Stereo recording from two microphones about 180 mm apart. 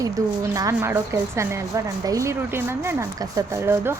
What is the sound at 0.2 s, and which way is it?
A woman's voice, 20° right (ahead or behind).